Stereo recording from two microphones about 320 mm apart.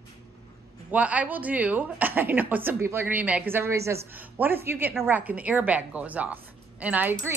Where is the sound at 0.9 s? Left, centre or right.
Centre.